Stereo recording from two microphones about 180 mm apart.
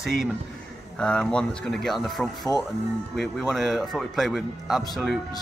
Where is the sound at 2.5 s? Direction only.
20° left (ahead or behind).